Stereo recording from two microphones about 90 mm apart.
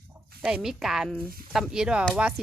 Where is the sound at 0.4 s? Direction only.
5° right (ahead or behind).